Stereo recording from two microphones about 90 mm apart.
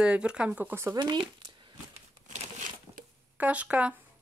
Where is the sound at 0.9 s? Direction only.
60° right (ahead or behind).